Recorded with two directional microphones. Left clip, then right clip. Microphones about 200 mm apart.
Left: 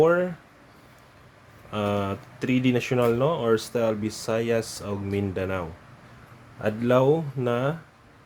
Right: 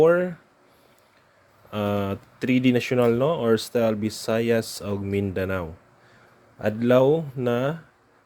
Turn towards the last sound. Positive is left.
turn(degrees=-25)  # may be behind; listen again after turning